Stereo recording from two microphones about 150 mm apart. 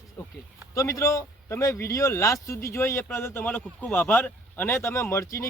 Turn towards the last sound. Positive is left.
turn(degrees=20)  # may be behind; listen again after turning